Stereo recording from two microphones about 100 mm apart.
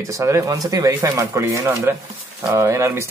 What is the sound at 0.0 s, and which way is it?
Speech, 35° right (ahead or behind).